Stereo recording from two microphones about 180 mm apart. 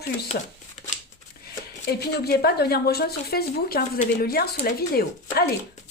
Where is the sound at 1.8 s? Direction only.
65° left (ahead or behind).